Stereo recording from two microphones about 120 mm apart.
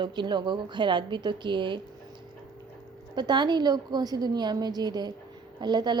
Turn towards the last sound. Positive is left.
turn(degrees=-40)  # may be behind; listen again after turning